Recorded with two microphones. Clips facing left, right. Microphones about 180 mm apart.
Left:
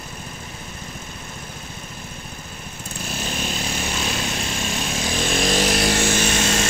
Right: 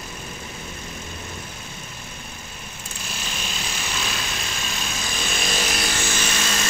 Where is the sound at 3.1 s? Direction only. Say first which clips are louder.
Left 7 dB; 50° left (ahead or behind).